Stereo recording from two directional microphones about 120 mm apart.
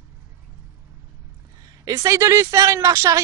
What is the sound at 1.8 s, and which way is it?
A woman's voice, 30° right (ahead or behind).